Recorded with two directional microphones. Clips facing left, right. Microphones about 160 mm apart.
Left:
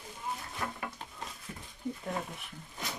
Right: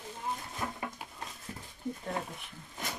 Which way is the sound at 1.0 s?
10° right (ahead or behind).